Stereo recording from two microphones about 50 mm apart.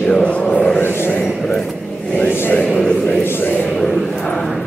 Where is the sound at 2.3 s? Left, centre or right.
Left.